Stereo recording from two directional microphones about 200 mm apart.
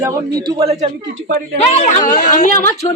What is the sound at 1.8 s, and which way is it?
Speech, 45° left (ahead or behind).